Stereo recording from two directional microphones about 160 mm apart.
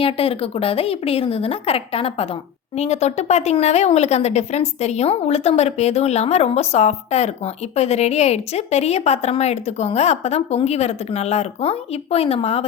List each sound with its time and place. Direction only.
0.0 s speech: 35° left (ahead or behind)